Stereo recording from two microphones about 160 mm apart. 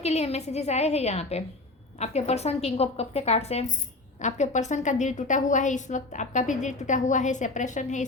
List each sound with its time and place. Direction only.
0.0 s a woman's voice: 40° left (ahead or behind)